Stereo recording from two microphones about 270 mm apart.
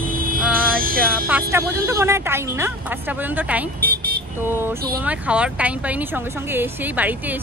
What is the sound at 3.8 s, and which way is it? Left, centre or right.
Vehicle, right.